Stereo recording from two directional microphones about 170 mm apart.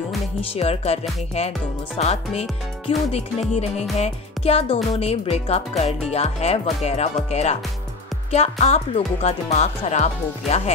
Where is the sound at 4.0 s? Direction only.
35° left (ahead or behind).